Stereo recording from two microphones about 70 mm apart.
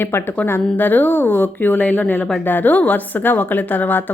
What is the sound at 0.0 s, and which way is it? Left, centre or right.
A woman's voice, left.